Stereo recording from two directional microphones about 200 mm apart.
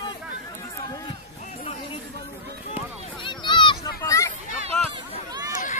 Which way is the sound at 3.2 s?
25° left (ahead or behind).